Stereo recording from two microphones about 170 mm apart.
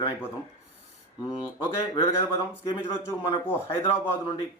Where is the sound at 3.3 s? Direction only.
30° left (ahead or behind).